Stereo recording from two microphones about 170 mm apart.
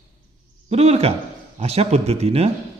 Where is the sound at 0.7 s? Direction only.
35° right (ahead or behind).